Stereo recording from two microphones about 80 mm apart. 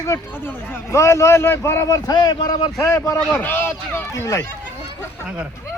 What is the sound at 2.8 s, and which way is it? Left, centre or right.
Speech, left.